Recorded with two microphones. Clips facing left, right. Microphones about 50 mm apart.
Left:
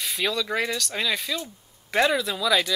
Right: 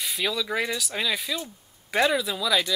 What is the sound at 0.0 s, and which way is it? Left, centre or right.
Speech, centre.